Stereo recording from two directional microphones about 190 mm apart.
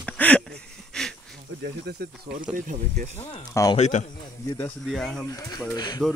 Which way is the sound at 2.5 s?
45° right (ahead or behind).